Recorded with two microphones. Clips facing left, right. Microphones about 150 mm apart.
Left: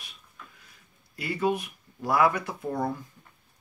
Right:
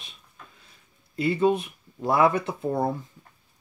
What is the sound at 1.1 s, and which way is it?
Speech, 25° right (ahead or behind).